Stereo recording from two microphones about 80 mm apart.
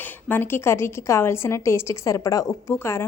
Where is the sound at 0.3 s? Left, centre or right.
Left.